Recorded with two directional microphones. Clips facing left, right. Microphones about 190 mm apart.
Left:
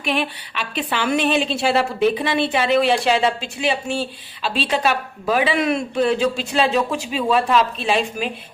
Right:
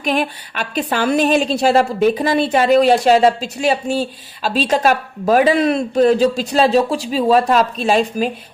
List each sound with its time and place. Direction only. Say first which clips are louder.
0.0 s a woman's voice: right 4 dB; 40° right (ahead or behind)